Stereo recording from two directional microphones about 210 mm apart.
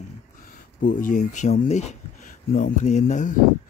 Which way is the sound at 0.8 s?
40° left (ahead or behind).